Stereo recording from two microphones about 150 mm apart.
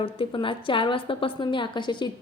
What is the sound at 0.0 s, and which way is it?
A woman's voice, 35° left (ahead or behind).